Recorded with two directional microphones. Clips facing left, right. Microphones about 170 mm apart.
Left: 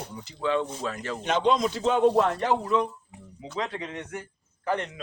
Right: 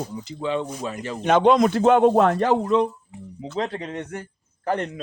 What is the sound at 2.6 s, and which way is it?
A man's voice, 30° right (ahead or behind).